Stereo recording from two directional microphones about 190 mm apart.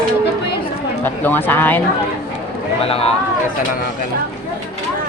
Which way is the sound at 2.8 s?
30° left (ahead or behind).